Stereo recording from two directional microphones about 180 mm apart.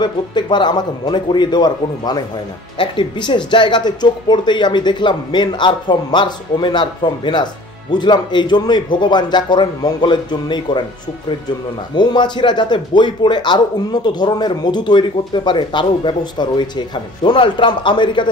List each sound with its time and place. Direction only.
0.0 s speech: 25° left (ahead or behind)
11.9 s speech: 25° left (ahead or behind)